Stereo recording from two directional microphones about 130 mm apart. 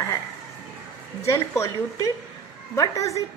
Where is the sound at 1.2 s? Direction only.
20° left (ahead or behind).